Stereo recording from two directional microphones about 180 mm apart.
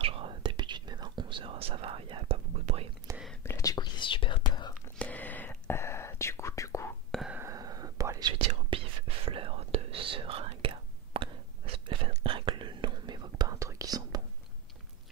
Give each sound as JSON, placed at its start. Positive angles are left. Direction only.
{"t": 0.0, "sound": "whispering", "side_deg": -30}
{"t": 3.1, "sound": "whispering", "side_deg": -15}
{"t": 3.4, "sound": "whispering", "side_deg": 20}
{"t": 4.8, "sound": "whispering", "side_deg": 10}
{"t": 7.1, "sound": "whispering", "side_deg": 0}
{"t": 7.3, "sound": "whispering", "side_deg": -20}
{"t": 8.4, "sound": "whispering", "side_deg": -30}